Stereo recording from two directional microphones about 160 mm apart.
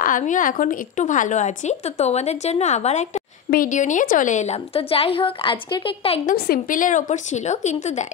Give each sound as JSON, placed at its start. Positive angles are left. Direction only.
{"t": 0.0, "sound": "a woman's voice", "side_deg": 55}
{"t": 3.4, "sound": "a woman's voice", "side_deg": 60}
{"t": 6.2, "sound": "a woman's voice", "side_deg": 75}